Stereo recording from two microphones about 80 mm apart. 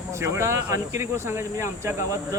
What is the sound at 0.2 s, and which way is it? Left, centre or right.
Speech, right.